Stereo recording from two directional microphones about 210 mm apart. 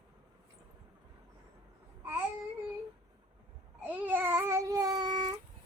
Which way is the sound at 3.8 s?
10° right (ahead or behind).